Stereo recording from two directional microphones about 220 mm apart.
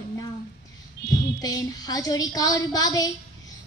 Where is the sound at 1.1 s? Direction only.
15° left (ahead or behind).